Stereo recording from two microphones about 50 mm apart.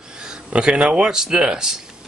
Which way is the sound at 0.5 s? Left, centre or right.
Right.